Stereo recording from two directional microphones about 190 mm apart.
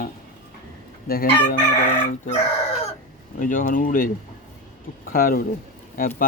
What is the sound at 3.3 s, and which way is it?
Speech, 45° left (ahead or behind).